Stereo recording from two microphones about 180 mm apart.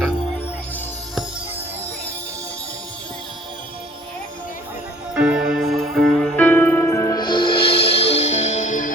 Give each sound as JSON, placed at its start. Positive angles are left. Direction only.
{"t": 5.1, "sound": "music", "side_deg": -5}